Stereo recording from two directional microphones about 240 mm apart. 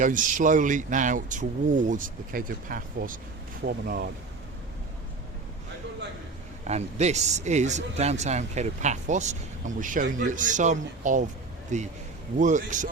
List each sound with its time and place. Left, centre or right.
0.0 s speech: right
6.7 s speech: right